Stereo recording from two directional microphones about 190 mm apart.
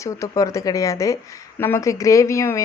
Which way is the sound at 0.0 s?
15° left (ahead or behind).